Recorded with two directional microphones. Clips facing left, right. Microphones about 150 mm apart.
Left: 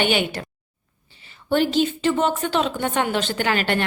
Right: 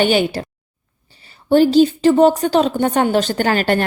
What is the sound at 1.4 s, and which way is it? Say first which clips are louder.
A woman's voice: right 8 dB; 35° right (ahead or behind).